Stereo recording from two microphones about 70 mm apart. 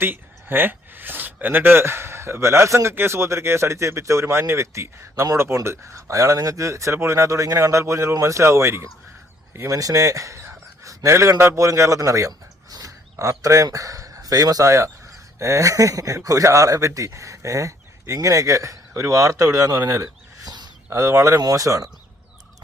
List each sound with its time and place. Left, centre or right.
0.0 s speech: right
5.4 s speech: right
20.4 s a sound: right
20.9 s speech: right